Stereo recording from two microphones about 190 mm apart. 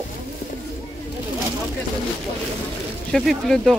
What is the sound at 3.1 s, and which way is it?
Speech, centre (ahead or behind).